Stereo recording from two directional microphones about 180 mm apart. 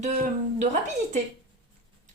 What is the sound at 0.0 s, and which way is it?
Speech, 45° right (ahead or behind).